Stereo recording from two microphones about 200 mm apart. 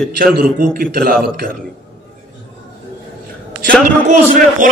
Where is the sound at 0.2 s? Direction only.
45° right (ahead or behind).